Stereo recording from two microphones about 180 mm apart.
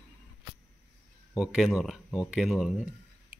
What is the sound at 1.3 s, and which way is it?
A man's voice, 5° right (ahead or behind).